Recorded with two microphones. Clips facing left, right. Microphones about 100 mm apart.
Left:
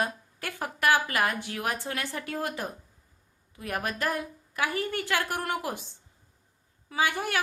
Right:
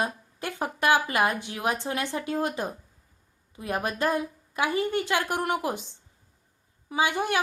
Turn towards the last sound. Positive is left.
turn(degrees=-20)  # may be behind; listen again after turning